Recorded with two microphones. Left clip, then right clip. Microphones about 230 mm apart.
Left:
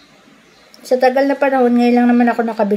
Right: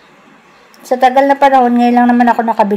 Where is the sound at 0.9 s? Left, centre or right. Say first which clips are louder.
Right 4 dB; right.